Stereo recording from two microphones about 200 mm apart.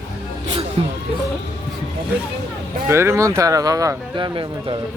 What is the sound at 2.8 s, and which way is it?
Speech, 15° right (ahead or behind).